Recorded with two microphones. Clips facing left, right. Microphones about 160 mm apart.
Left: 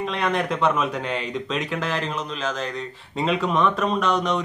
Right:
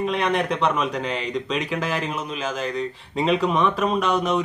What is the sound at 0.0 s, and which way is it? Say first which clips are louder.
Speech: right 2 dB; centre (ahead or behind).